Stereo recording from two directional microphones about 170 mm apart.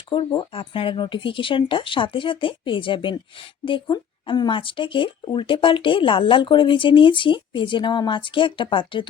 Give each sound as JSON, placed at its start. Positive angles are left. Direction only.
{"t": 0.3, "sound": "speech", "side_deg": 30}